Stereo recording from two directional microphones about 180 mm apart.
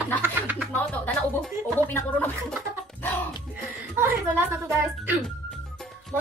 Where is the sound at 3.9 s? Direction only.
10° right (ahead or behind).